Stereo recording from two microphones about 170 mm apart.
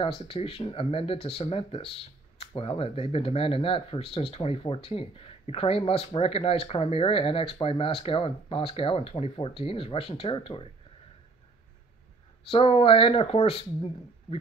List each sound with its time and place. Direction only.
0.2 s speech: 35° left (ahead or behind)
12.4 s speech: 35° left (ahead or behind)